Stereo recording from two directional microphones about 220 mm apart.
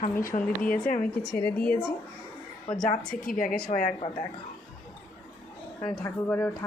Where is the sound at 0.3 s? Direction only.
40° left (ahead or behind).